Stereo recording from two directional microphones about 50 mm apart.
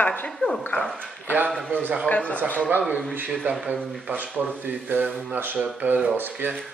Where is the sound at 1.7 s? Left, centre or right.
Right.